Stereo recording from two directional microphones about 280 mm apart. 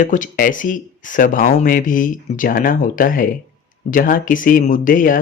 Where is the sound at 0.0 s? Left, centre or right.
Left.